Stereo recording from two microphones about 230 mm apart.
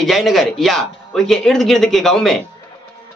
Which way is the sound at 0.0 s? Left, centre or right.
Centre.